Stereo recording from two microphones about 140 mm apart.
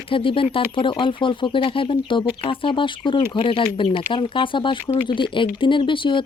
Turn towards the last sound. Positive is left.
turn(degrees=35)  # may be behind; listen again after turning